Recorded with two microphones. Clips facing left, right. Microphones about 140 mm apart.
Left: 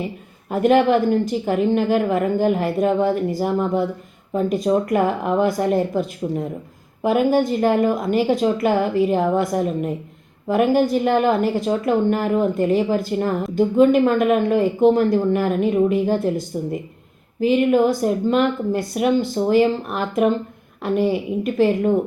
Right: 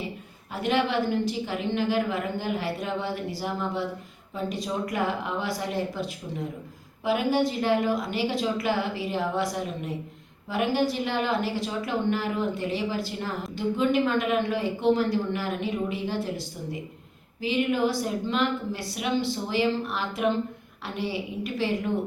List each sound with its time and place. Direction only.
0.5 s a woman's voice: 50° left (ahead or behind)
17.4 s a woman's voice: 50° left (ahead or behind)